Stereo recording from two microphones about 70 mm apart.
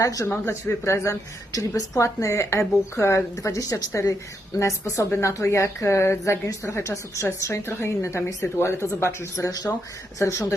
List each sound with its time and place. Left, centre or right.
0.0 s a woman's voice: left
0.4 s speech: left
1.5 s a woman's voice: left
2.0 s a woman's voice: left
4.5 s a woman's voice: left